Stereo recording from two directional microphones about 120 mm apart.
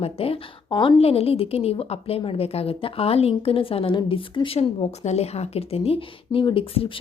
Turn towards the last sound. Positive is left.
turn(degrees=50)  # may be behind; listen again after turning